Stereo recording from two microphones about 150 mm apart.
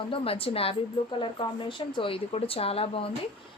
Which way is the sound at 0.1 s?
40° left (ahead or behind).